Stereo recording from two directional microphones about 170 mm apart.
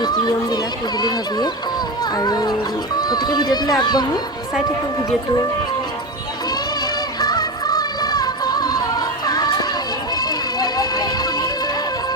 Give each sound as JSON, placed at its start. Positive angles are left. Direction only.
{"t": 0.0, "sound": "speech", "side_deg": 25}
{"t": 6.5, "sound": "music", "side_deg": 25}